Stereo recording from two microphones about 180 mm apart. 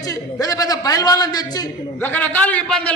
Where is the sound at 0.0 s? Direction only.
20° left (ahead or behind).